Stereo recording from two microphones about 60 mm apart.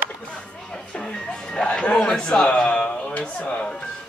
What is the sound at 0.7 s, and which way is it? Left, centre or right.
Speech, centre.